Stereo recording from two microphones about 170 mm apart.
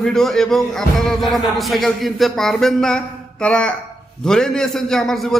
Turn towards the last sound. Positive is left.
turn(degrees=0)  # may be behind; listen again after turning